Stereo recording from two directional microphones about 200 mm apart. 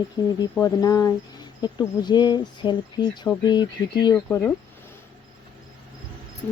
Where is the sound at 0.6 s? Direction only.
15° left (ahead or behind).